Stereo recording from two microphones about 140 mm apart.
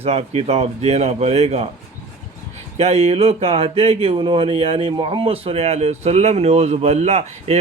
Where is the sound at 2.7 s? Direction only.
50° right (ahead or behind).